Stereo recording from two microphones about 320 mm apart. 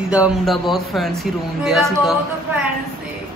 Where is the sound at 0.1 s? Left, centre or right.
Centre.